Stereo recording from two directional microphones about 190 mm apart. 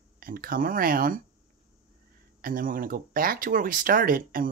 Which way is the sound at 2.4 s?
50° right (ahead or behind).